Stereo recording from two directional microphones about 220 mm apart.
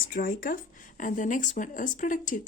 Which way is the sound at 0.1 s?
40° left (ahead or behind).